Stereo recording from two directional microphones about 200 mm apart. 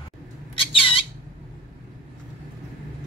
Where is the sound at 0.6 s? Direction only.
25° left (ahead or behind).